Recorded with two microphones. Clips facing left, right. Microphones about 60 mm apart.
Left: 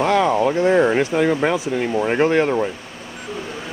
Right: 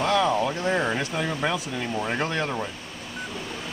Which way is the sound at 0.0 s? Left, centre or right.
Left.